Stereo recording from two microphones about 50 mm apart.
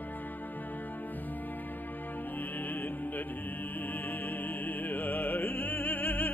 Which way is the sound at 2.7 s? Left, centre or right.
Left.